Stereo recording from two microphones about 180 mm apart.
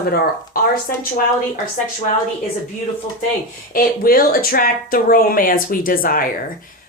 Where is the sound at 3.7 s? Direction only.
55° left (ahead or behind).